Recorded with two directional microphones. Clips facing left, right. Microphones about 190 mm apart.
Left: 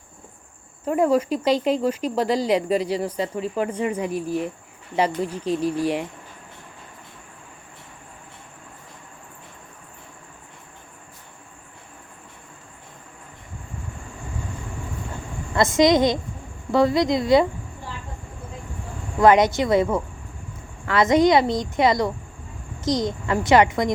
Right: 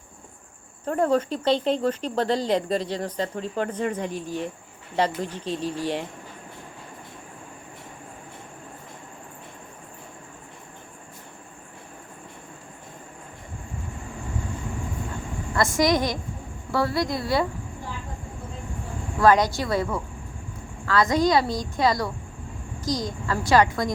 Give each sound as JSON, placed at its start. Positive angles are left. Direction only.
{"t": 0.9, "sound": "speech", "side_deg": 10}
{"t": 15.5, "sound": "a woman's voice", "side_deg": 20}
{"t": 19.2, "sound": "a woman's voice", "side_deg": 20}